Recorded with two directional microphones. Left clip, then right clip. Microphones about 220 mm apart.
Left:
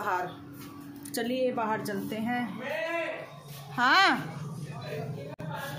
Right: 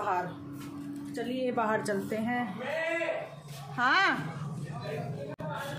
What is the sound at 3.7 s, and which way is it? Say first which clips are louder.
Speech: left 3 dB; 20° left (ahead or behind).